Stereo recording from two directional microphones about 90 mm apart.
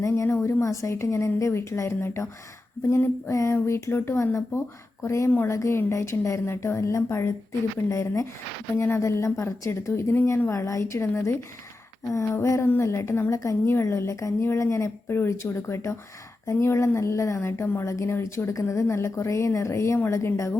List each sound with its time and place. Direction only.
0.0 s a woman's voice: 30° left (ahead or behind)
5.5 s a woman's voice: 35° left (ahead or behind)
12.1 s a woman's voice: 30° left (ahead or behind)